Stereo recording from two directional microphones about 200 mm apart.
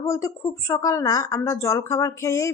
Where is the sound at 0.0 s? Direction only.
15° left (ahead or behind).